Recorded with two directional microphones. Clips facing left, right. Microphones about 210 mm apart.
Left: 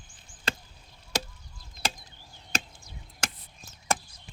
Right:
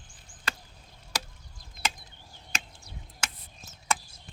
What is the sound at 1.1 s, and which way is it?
Chop, 25° left (ahead or behind).